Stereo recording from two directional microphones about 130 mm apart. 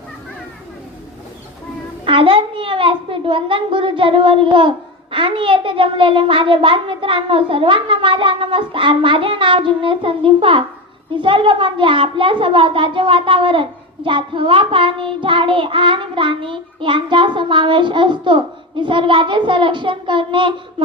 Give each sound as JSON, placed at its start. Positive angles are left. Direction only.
{"t": 2.0, "sound": "a child's voice", "side_deg": -40}